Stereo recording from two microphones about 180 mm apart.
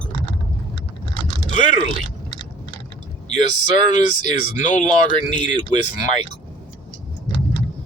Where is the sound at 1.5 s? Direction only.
45° left (ahead or behind).